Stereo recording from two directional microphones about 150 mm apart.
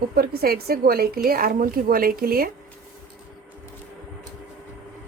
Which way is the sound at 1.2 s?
75° right (ahead or behind).